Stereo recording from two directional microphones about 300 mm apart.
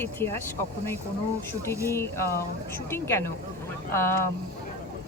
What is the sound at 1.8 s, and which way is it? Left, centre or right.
Speech, centre.